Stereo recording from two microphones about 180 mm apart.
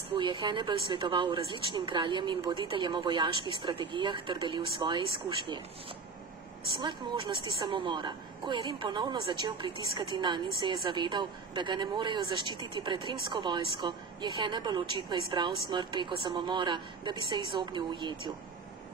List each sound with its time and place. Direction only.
0.2 s a woman's voice: 25° right (ahead or behind)
6.8 s a woman's voice: 25° right (ahead or behind)